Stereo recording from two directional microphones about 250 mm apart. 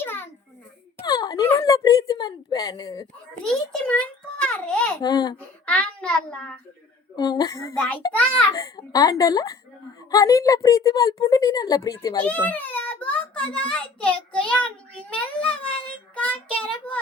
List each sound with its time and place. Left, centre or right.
0.0 s a sound: centre
1.0 s speech: centre
3.4 s a child's voice: centre
5.0 s a woman's voice: centre
5.6 s a child's voice: centre
7.2 s a woman's voice: centre